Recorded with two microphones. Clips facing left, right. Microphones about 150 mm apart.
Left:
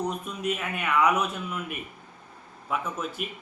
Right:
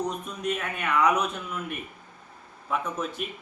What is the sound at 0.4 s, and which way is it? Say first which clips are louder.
Speech: even; 5° left (ahead or behind).